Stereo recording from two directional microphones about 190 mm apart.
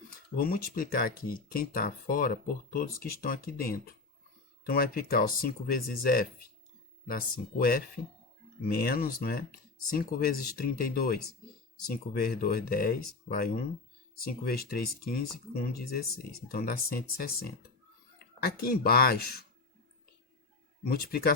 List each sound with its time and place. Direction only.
0.1 s speech: 50° left (ahead or behind)
20.8 s speech: 55° left (ahead or behind)